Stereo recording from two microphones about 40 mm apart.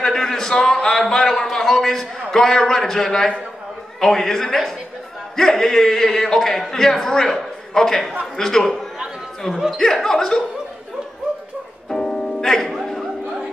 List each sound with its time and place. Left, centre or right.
0.0 s a sound: centre
2.3 s a man's voice: centre
9.5 s speech: centre
9.8 s a man's voice: centre
12.4 s speech: centre